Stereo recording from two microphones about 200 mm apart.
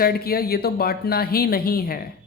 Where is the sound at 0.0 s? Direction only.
50° left (ahead or behind).